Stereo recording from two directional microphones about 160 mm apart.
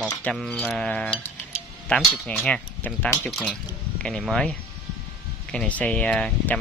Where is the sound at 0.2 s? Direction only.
5° left (ahead or behind).